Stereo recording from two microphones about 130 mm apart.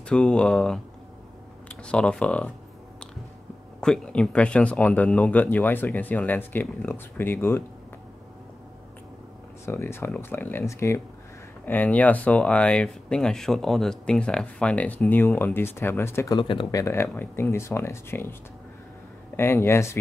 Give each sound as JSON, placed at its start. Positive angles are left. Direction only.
{"t": 0.1, "sound": "speech", "side_deg": 5}
{"t": 3.8, "sound": "speech", "side_deg": 5}
{"t": 9.7, "sound": "speech", "side_deg": 20}
{"t": 16.3, "sound": "speech", "side_deg": 40}
{"t": 16.7, "sound": "speech", "side_deg": 20}
{"t": 19.3, "sound": "speech", "side_deg": 20}